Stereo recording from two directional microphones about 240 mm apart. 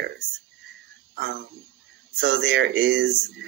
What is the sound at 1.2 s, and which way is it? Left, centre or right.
Speech, right.